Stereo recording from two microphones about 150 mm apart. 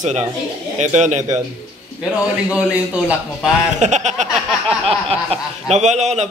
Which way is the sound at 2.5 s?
5° right (ahead or behind).